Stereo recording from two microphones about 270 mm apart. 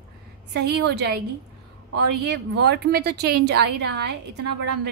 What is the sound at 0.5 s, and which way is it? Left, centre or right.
Speech, right.